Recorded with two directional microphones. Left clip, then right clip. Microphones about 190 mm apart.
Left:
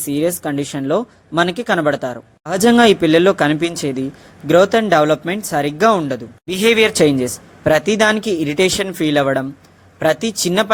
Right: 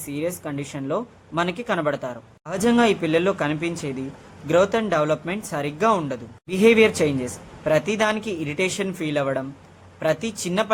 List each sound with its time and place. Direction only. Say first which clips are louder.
0.1 s speech: left 9 dB; 35° left (ahead or behind)